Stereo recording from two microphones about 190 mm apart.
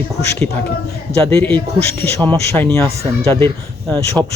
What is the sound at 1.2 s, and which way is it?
Speech, 15° left (ahead or behind).